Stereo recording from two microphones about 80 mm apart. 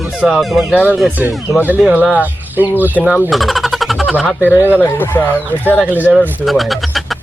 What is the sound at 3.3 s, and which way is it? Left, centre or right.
Vehicle, centre.